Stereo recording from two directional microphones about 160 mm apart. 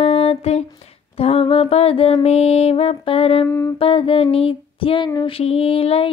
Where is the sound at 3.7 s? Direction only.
35° left (ahead or behind).